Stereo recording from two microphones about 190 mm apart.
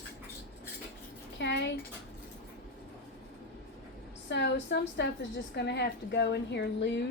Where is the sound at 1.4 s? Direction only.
65° left (ahead or behind).